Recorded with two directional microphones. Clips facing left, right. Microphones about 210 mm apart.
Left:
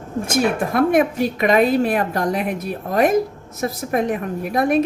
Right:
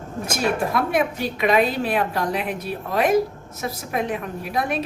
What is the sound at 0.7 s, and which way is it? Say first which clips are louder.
A woman's voice: left 6 dB; 45° left (ahead or behind).